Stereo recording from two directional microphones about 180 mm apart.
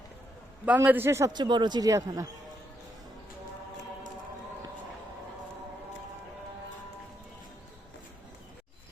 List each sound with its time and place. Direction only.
0.6 s a man's voice: 10° right (ahead or behind)